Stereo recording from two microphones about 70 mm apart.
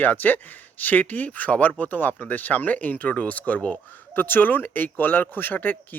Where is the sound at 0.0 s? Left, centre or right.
Left.